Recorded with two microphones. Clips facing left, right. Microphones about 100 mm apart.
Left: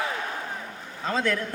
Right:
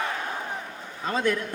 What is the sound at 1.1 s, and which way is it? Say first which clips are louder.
Speech: right 1 dB; 15° right (ahead or behind).